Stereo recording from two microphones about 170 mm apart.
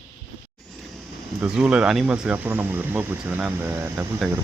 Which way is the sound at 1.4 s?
5° right (ahead or behind).